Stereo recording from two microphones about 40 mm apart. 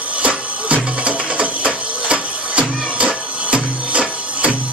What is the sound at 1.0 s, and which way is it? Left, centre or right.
Printer, right.